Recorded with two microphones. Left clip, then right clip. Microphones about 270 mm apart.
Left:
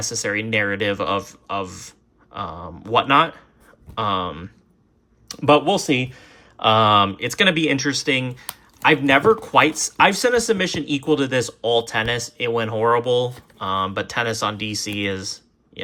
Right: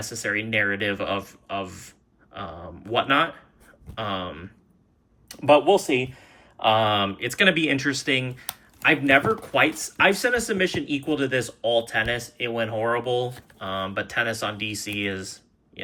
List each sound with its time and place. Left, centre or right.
0.0 s speech: centre
6.0 s speech: left
6.6 s speech: centre